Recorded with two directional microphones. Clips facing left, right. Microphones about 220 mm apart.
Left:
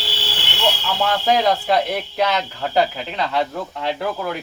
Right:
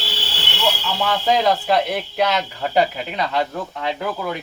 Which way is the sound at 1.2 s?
Centre (ahead or behind).